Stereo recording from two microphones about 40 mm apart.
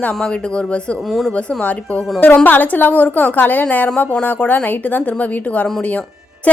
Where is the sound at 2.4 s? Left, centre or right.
Left.